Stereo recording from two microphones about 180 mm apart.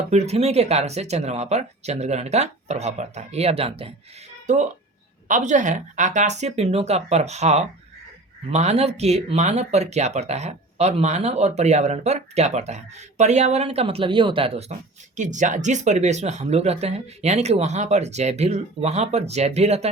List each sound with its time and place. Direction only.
0.1 s speech: 35° right (ahead or behind)
15.1 s speech: 45° right (ahead or behind)